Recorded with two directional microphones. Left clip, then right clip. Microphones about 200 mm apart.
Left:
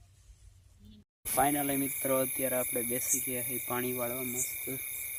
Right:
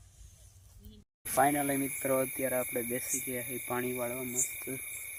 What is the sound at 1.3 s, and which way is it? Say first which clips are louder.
Speech: right 2 dB; 25° right (ahead or behind).